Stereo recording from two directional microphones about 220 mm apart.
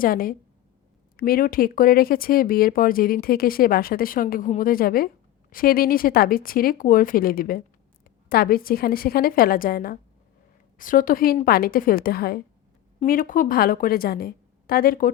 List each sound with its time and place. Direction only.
0.0 s speech: 40° left (ahead or behind)